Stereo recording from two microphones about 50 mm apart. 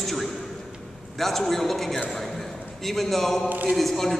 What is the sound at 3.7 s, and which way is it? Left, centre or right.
Speech, centre.